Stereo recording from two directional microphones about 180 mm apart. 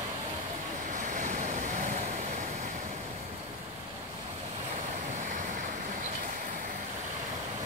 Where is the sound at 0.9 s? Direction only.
45° right (ahead or behind).